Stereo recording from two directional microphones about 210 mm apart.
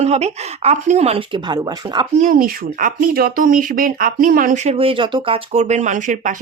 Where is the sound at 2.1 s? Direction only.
40° right (ahead or behind).